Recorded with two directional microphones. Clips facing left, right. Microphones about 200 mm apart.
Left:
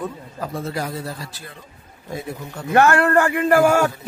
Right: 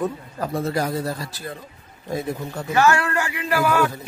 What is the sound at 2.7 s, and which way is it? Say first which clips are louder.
Speech: left 4 dB; 55° left (ahead or behind).